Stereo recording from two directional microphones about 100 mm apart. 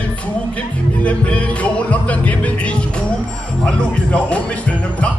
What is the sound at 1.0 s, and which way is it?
Music, 15° left (ahead or behind).